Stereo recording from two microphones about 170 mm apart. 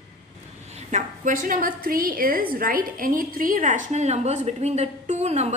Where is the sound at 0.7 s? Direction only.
45° right (ahead or behind).